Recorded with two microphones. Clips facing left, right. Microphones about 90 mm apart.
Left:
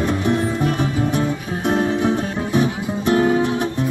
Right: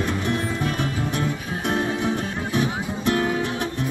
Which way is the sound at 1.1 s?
25° left (ahead or behind).